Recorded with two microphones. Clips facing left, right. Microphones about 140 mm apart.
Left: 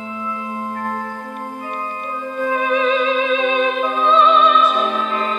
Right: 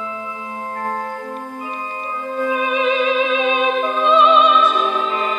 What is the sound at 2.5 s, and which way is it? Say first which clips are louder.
Music: left 1 dB; 15° right (ahead or behind).